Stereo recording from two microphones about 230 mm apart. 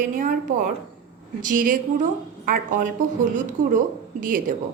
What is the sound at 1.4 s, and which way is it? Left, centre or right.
A woman's voice, right.